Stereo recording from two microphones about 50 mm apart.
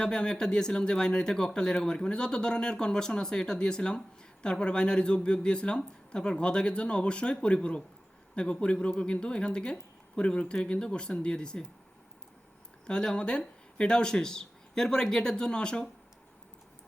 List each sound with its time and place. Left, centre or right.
0.0 s speech: centre
12.9 s speech: centre